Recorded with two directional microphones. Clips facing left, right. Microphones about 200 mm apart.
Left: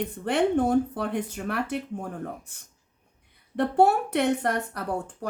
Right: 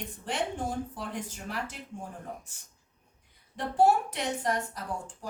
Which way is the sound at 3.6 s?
60° left (ahead or behind).